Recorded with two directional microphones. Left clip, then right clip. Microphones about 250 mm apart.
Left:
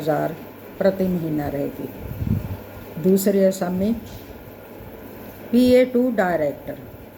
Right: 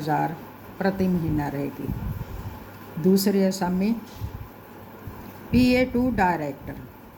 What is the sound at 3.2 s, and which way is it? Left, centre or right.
Speech, centre.